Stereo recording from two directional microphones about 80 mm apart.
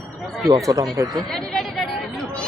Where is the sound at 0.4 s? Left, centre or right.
Right.